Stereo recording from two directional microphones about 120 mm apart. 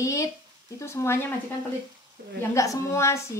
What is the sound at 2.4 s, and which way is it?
Speech, 25° left (ahead or behind).